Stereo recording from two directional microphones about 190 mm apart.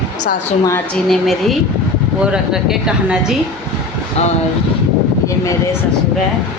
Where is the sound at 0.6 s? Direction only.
15° left (ahead or behind).